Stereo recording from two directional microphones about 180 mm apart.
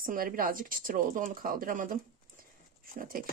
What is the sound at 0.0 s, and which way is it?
Speech, 50° right (ahead or behind).